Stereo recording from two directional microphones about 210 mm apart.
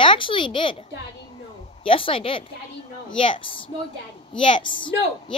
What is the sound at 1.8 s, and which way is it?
Speech, 25° left (ahead or behind).